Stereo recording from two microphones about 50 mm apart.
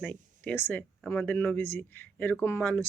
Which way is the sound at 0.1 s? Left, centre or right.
Left.